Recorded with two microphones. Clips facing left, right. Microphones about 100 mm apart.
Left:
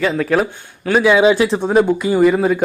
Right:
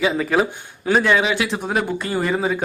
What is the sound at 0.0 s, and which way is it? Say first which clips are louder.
Speech: left 2 dB; 5° right (ahead or behind).